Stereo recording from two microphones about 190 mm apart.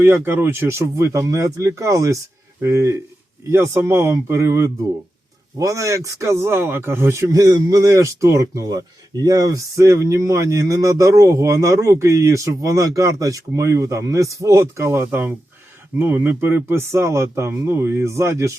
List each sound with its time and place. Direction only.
0.0 s speech: 10° right (ahead or behind)